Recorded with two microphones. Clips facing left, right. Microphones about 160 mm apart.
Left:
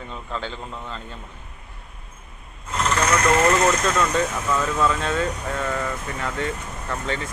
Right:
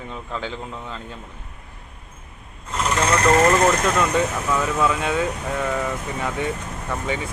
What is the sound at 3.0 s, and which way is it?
Vehicle, 30° right (ahead or behind).